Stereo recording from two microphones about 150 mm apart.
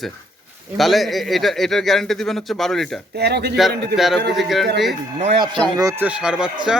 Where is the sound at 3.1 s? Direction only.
90° right.